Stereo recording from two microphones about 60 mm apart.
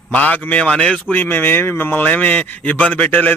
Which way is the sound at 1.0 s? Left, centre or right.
Left.